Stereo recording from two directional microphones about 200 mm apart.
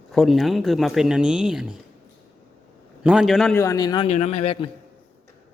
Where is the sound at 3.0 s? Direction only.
5° right (ahead or behind).